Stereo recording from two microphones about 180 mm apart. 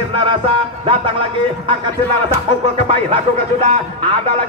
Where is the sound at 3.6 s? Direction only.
25° right (ahead or behind).